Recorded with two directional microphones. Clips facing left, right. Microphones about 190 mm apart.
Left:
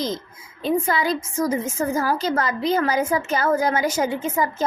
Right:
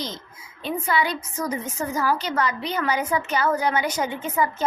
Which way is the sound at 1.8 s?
50° left (ahead or behind).